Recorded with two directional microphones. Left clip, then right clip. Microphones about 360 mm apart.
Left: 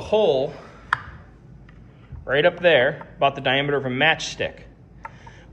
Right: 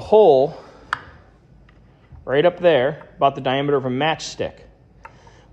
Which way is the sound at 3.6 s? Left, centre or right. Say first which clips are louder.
Right 2 dB; right.